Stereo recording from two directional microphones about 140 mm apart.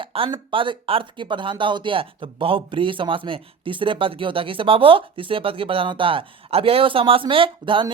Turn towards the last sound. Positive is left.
turn(degrees=-35)  # may be behind; listen again after turning